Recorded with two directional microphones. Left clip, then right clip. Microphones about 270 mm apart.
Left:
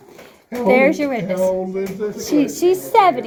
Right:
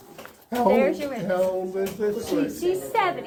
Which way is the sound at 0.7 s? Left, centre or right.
Left.